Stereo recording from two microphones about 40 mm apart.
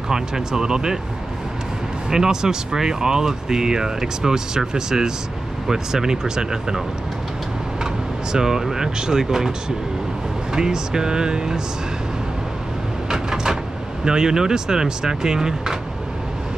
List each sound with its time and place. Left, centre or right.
0.1 s speech: centre
2.0 s speech: centre
7.8 s speech: centre
10.5 s speech: centre
13.1 s a sound: centre
14.0 s speech: centre